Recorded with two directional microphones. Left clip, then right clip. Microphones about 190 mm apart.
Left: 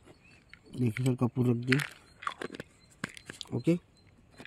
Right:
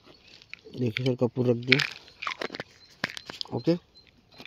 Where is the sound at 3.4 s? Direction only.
35° left (ahead or behind).